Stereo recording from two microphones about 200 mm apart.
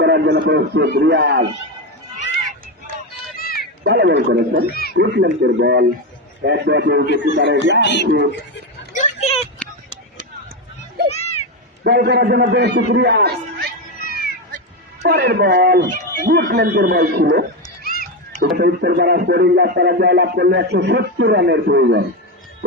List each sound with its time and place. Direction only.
0.0 s speech: 60° right (ahead or behind)
3.3 s a sound: 50° left (ahead or behind)
3.8 s speech: 60° right (ahead or behind)
4.7 s speech: 50° left (ahead or behind)
4.9 s speech: 55° right (ahead or behind)
7.8 s speech: 60° left (ahead or behind)
8.9 s vehicle: 40° left (ahead or behind)
11.1 s a sound: 30° left (ahead or behind)
11.8 s speech: 55° right (ahead or behind)
14.0 s music: 45° left (ahead or behind)
15.0 s speech: 55° right (ahead or behind)
17.8 s a sound: 50° left (ahead or behind)
18.4 s speech: 55° right (ahead or behind)